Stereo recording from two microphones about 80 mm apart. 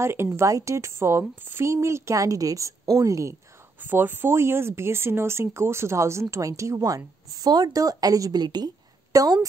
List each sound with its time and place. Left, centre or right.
0.0 s a woman's voice: right
3.8 s a woman's voice: right